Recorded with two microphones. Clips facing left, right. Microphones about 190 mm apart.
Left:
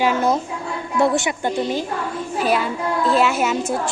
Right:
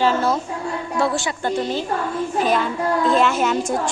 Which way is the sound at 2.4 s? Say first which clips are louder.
Even; 10° left (ahead or behind).